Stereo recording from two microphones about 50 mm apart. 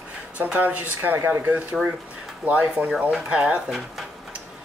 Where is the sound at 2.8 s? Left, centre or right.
Right.